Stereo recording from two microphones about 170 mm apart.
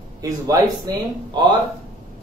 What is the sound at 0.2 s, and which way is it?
A man's voice, 20° right (ahead or behind).